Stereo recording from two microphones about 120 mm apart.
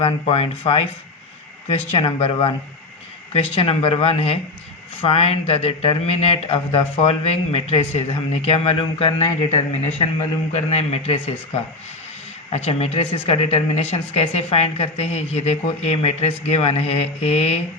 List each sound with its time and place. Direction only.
0.0 s speech: 50° left (ahead or behind)
1.9 s speech: 55° left (ahead or behind)
10.5 s speech: 65° left (ahead or behind)